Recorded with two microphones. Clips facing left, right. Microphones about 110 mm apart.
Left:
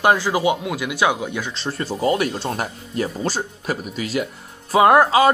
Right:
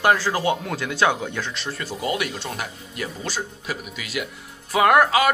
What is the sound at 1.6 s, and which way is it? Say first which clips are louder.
Speech: left 5 dB; 35° left (ahead or behind).